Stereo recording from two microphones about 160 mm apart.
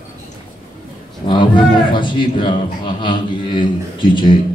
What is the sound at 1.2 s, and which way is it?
Speech, 30° left (ahead or behind).